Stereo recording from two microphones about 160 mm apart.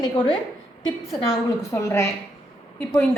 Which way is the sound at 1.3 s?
20° left (ahead or behind).